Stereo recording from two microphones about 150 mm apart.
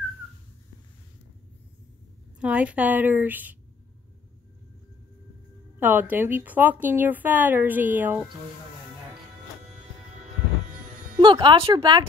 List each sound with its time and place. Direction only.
2.4 s a woman's voice: 10° right (ahead or behind)
5.8 s a woman's voice: 10° right (ahead or behind)
11.1 s speech: 30° right (ahead or behind)